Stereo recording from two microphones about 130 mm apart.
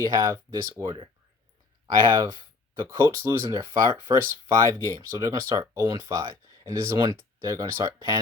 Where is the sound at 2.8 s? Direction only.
20° right (ahead or behind).